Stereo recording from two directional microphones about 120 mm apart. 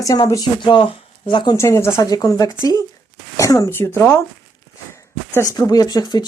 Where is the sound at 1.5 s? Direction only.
25° left (ahead or behind).